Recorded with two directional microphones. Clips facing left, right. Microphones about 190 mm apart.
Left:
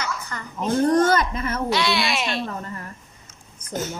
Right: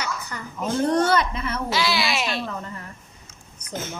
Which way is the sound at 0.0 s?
10° right (ahead or behind).